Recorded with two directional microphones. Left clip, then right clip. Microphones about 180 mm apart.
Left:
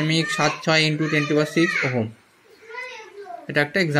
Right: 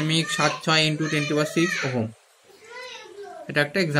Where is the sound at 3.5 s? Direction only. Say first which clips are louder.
Left 2 dB; 20° left (ahead or behind).